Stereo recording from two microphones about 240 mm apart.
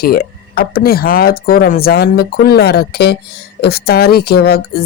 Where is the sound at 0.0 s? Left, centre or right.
Left.